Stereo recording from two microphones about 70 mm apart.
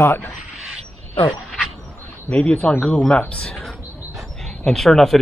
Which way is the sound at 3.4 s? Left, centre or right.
Centre.